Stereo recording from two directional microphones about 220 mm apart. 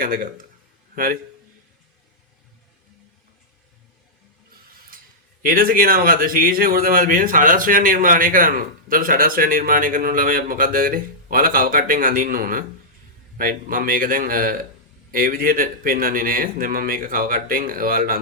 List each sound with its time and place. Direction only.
0.0 s speech: 40° right (ahead or behind)
5.4 s speech: 40° right (ahead or behind)